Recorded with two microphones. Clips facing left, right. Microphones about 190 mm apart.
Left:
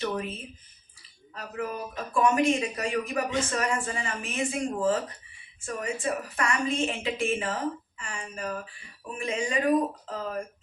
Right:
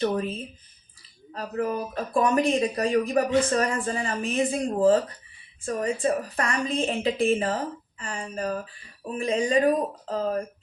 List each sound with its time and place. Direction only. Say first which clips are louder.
0.0 s a woman's voice: right 5 dB; 35° right (ahead or behind)